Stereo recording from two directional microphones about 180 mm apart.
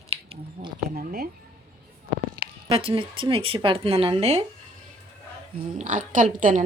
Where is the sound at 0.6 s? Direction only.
50° right (ahead or behind).